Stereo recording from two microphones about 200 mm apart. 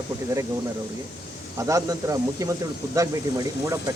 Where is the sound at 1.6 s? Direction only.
15° right (ahead or behind).